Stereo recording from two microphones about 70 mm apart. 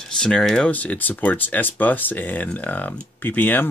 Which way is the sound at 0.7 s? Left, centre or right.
Left.